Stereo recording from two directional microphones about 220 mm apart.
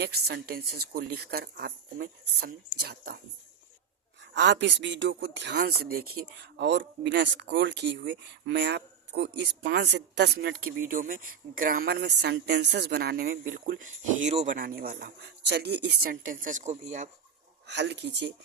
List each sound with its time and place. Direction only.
0.0 s speech: 45° right (ahead or behind)
4.2 s speech: 55° right (ahead or behind); by 17.1 s 30° right (ahead or behind)
17.7 s speech: 50° right (ahead or behind)